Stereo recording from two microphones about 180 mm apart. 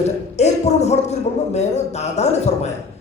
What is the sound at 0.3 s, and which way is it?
A man's voice, 40° left (ahead or behind).